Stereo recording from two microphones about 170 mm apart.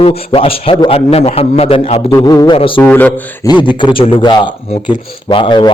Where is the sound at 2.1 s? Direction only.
20° left (ahead or behind).